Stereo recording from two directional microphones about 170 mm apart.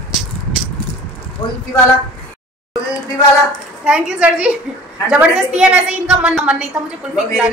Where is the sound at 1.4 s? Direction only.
25° left (ahead or behind).